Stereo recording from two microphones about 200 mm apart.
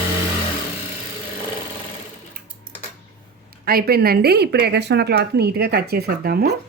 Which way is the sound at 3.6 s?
50° right (ahead or behind).